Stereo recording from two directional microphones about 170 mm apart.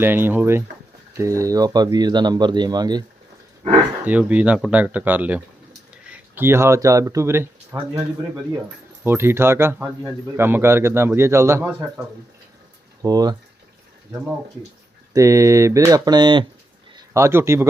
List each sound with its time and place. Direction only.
0.0 s speech: 10° right (ahead or behind)
4.0 s speech: 10° right (ahead or behind)
9.0 s speech: 15° right (ahead or behind)
11.7 s speech: 5° right (ahead or behind)
13.0 s speech: 20° right (ahead or behind)
15.1 s speech: 20° right (ahead or behind)
16.9 s speech: 15° right (ahead or behind)